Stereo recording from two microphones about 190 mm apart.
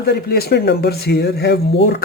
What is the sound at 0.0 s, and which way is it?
Speech, 55° left (ahead or behind).